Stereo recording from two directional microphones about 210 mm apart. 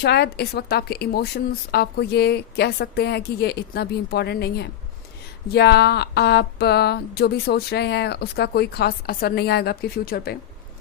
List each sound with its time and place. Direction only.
0.0 s speech: 50° left (ahead or behind)